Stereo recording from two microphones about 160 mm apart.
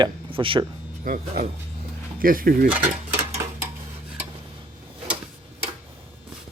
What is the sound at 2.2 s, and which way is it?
Speech, 65° right (ahead or behind).